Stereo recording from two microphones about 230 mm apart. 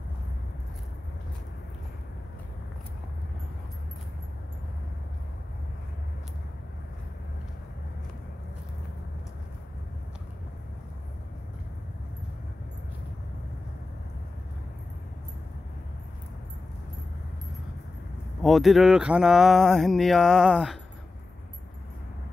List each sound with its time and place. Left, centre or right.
18.4 s speech: centre